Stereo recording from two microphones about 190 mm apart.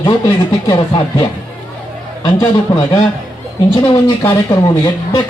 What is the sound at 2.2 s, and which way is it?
A man's voice, 20° left (ahead or behind).